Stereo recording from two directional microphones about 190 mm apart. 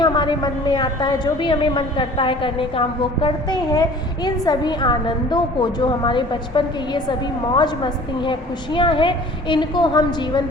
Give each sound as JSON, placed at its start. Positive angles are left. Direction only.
{"t": 0.0, "sound": "a woman's voice", "side_deg": 25}